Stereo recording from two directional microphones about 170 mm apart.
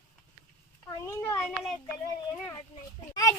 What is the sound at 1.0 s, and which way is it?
Speech, 15° left (ahead or behind).